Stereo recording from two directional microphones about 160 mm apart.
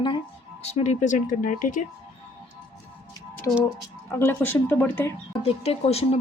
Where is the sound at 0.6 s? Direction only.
45° left (ahead or behind).